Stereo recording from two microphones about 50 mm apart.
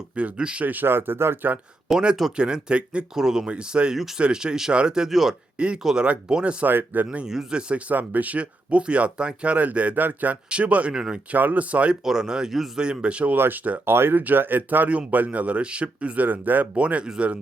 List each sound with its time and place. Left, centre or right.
0.2 s speech: right
0.6 s speech: right
0.9 s speech: right
1.9 s speech: centre
5.8 s speech: centre
6.7 s speech: right
7.3 s speech: centre
7.7 s speech: right
10.9 s speech: centre
11.3 s speech: right
12.0 s speech: centre
12.8 s speech: right
13.3 s speech: right
14.8 s speech: right